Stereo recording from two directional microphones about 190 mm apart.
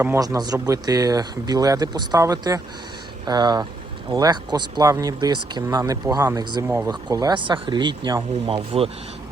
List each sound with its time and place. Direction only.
0.0 s speech: 15° right (ahead or behind)
6.9 s speech: 20° right (ahead or behind)